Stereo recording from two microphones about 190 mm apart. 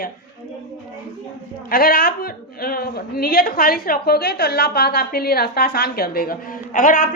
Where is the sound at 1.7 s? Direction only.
50° left (ahead or behind).